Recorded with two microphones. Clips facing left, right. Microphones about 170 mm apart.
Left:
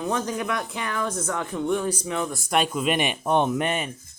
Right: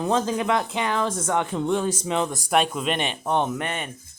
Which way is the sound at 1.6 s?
90° right.